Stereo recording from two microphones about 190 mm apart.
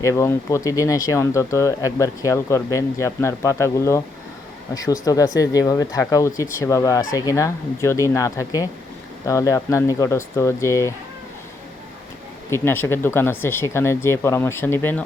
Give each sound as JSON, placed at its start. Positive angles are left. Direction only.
{"t": 0.0, "sound": "speech", "side_deg": 15}
{"t": 12.5, "sound": "speech", "side_deg": 15}